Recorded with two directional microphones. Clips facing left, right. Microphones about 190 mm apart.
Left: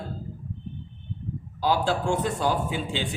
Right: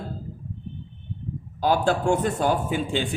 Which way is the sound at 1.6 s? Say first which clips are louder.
Right 3 dB; 50° right (ahead or behind).